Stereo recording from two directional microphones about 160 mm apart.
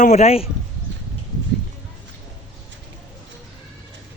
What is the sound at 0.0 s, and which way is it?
Speech, 45° left (ahead or behind).